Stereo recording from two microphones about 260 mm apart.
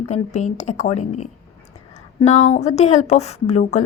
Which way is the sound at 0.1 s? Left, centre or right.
Left.